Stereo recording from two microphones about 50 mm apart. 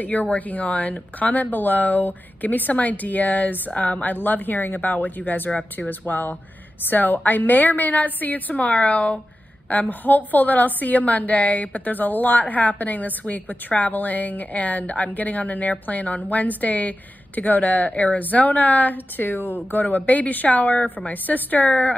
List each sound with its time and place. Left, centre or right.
0.0 s a woman's voice: left